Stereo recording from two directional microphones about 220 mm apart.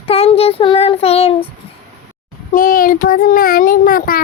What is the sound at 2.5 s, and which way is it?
A child's voice, 40° left (ahead or behind).